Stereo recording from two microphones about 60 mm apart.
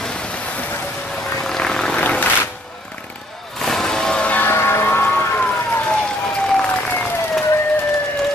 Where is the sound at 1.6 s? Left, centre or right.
Centre.